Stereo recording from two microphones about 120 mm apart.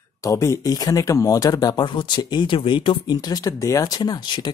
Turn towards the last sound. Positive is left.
turn(degrees=35)  # may be behind; listen again after turning